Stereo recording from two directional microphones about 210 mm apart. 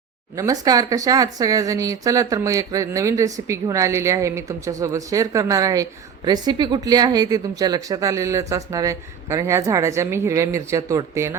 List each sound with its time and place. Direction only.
0.3 s a woman's voice: 15° right (ahead or behind)